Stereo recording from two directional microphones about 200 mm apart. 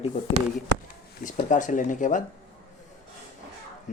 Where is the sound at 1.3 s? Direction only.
40° left (ahead or behind).